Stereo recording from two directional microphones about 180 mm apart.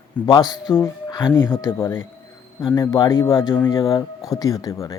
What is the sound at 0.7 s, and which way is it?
Speech, 15° left (ahead or behind).